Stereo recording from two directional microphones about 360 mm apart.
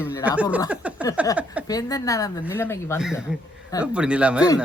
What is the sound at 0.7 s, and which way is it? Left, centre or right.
Speech, centre.